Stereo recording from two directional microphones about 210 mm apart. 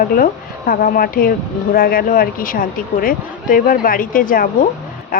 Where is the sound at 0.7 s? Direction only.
40° left (ahead or behind).